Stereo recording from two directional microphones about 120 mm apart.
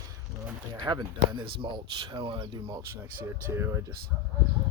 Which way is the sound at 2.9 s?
20° right (ahead or behind).